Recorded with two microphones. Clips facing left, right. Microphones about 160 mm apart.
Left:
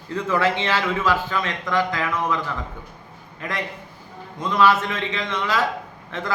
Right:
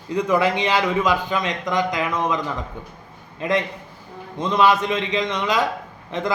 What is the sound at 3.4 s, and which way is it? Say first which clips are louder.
A man's voice: right 7 dB; 20° right (ahead or behind).